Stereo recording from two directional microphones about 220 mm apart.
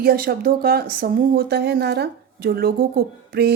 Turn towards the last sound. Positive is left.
turn(degrees=-45)  # may be behind; listen again after turning